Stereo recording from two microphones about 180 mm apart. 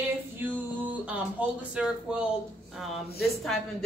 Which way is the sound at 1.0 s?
5° right (ahead or behind).